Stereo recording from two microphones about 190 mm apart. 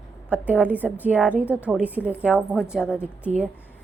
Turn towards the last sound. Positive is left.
turn(degrees=-5)  # may be behind; listen again after turning